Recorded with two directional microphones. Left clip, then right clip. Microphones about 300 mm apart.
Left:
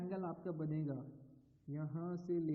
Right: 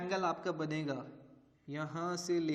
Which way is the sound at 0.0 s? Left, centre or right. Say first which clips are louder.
Right 10 dB; centre.